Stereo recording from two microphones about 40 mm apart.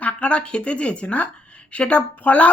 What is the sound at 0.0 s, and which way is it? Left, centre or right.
A woman's voice, left.